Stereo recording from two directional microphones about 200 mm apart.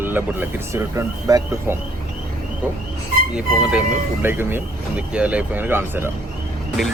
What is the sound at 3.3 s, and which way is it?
A man's voice, 5° right (ahead or behind).